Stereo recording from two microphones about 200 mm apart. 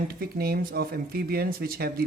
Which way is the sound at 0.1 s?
50° right (ahead or behind).